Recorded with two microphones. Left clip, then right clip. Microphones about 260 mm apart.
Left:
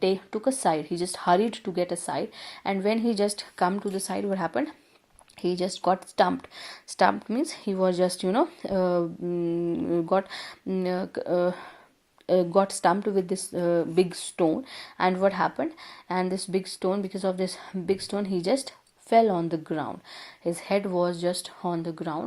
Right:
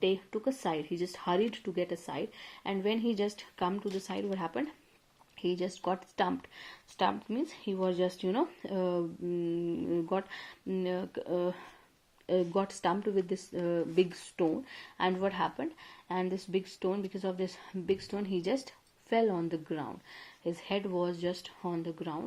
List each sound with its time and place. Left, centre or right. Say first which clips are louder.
0.0 s speech: left 6 dB; left